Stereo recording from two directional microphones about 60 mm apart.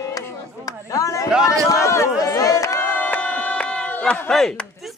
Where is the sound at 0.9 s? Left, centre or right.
Left.